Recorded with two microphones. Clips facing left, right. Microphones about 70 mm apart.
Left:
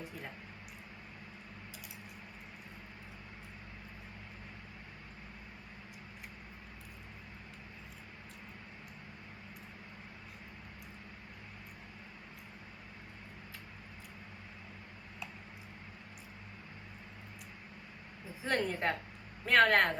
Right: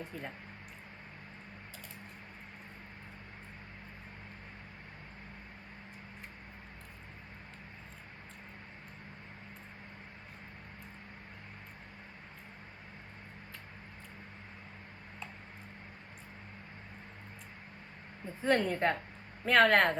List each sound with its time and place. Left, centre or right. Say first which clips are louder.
18.4 s a woman's voice: right 4 dB; centre